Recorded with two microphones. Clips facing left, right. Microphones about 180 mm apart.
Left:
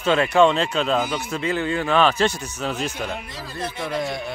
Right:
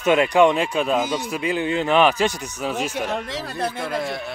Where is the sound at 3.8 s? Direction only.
5° right (ahead or behind).